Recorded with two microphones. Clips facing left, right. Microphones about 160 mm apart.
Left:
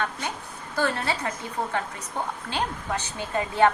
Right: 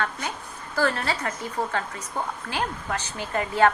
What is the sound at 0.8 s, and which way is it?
Speech, 20° left (ahead or behind).